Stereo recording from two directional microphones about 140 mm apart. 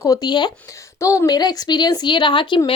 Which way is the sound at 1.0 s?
20° left (ahead or behind).